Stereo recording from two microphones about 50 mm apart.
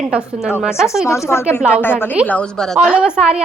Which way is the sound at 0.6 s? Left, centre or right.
Centre.